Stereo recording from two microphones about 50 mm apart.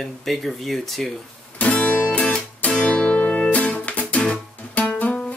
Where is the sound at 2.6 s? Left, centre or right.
Left.